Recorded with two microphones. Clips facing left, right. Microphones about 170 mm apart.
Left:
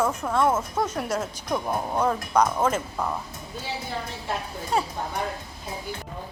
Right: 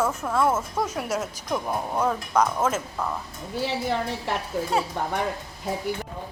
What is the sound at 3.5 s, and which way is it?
A woman's voice, 75° right (ahead or behind).